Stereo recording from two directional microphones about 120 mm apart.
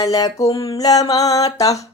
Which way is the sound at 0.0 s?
30° left (ahead or behind).